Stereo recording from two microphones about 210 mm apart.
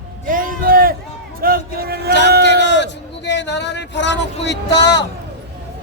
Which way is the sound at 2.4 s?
55° left (ahead or behind).